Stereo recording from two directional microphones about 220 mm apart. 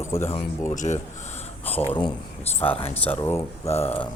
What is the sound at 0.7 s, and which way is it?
Speech, 35° left (ahead or behind).